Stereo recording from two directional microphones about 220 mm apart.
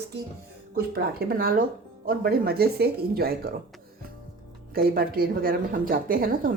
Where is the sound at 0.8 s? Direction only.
45° right (ahead or behind).